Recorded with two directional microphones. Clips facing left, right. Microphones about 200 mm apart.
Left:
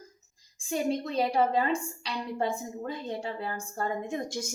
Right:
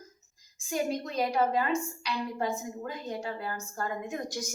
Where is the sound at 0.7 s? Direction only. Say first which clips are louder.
Left 2 dB; 30° left (ahead or behind).